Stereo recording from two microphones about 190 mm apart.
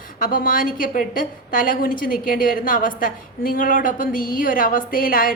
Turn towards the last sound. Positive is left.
turn(degrees=50)  # may be behind; listen again after turning